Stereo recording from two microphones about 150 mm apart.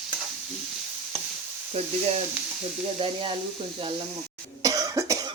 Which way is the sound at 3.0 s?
35° right (ahead or behind).